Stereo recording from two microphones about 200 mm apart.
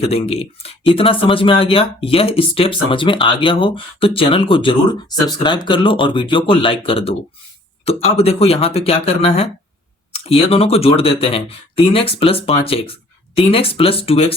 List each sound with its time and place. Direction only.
0.0 s speech: 30° left (ahead or behind)